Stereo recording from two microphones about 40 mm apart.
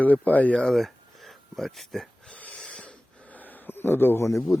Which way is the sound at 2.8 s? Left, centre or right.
Left.